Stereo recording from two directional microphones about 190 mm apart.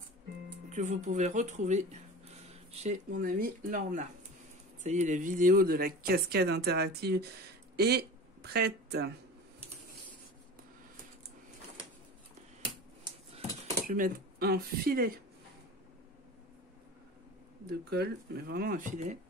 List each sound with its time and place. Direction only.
0.7 s speech: 40° right (ahead or behind); by 9.1 s 60° right (ahead or behind)
13.8 s speech: 45° right (ahead or behind)
17.6 s speech: 60° right (ahead or behind)